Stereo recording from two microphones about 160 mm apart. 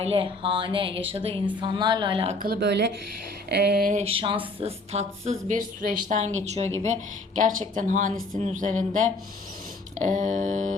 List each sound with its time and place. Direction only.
0.0 s speech: 35° right (ahead or behind)
2.4 s speech: 80° right
3.5 s a sound: 90° right
3.9 s speech: 35° right (ahead or behind)